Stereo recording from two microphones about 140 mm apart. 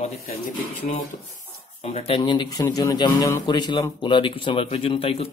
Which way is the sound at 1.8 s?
45° left (ahead or behind).